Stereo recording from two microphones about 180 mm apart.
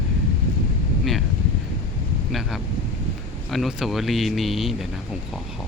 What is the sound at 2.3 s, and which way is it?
Speech, centre (ahead or behind).